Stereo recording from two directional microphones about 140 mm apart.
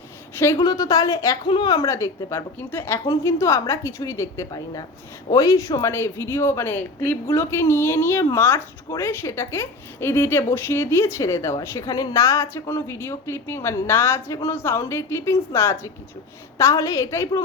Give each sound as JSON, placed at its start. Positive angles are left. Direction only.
{"t": 0.5, "sound": "a woman's voice", "side_deg": 25}